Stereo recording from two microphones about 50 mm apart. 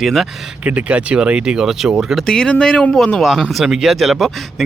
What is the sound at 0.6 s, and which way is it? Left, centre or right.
Speech, right.